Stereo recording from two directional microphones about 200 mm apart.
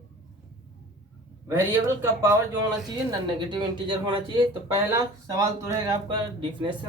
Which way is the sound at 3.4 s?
20° right (ahead or behind).